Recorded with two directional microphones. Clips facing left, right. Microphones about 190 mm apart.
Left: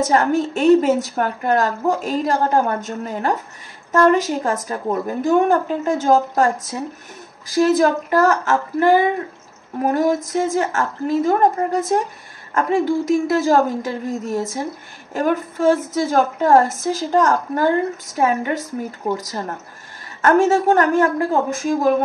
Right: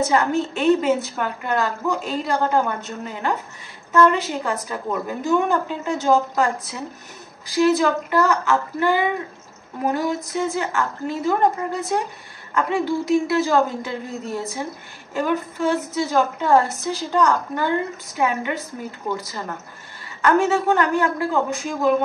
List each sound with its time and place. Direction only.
0.1 s a woman's voice: 45° left (ahead or behind)